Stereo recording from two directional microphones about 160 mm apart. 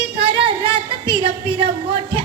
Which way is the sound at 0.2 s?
35° right (ahead or behind).